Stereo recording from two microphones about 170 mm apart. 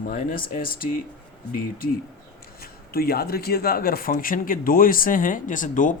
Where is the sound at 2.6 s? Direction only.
65° left (ahead or behind).